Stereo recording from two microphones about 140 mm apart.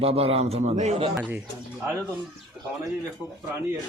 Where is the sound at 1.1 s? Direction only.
10° right (ahead or behind).